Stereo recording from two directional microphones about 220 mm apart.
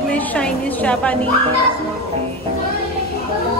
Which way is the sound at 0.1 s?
5° left (ahead or behind).